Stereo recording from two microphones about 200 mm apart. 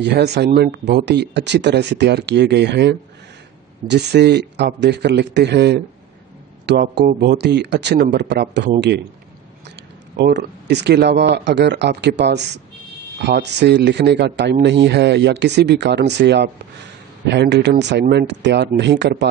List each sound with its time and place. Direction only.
0.0 s speech: 55° right (ahead or behind)
10.1 s speech: 60° right (ahead or behind)